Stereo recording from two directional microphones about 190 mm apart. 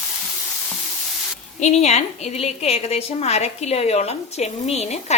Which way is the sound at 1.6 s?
35° left (ahead or behind).